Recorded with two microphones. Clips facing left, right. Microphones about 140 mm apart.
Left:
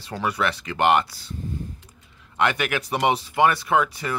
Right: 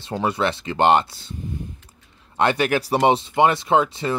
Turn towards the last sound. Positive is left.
turn(degrees=-25)  # may be behind; listen again after turning